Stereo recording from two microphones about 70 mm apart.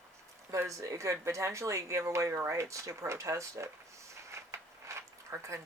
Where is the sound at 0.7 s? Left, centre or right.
Right.